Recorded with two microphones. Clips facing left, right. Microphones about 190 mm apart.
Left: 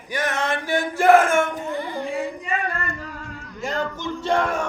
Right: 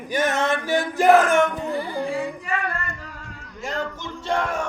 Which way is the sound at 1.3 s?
35° right (ahead or behind).